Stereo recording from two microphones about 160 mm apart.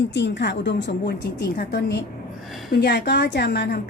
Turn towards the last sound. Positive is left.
turn(degrees=90)